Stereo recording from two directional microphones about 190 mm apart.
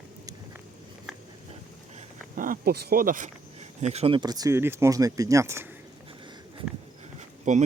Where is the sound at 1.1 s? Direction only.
Centre (ahead or behind).